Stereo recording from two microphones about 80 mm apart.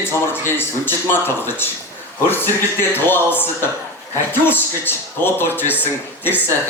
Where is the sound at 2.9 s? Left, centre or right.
Left.